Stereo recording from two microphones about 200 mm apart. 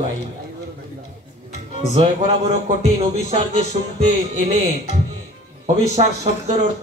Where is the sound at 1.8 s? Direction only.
30° right (ahead or behind).